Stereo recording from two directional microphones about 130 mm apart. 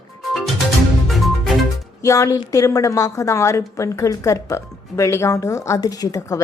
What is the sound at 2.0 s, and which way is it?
A woman's voice, 25° left (ahead or behind).